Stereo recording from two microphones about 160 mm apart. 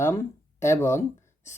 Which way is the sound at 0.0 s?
15° left (ahead or behind).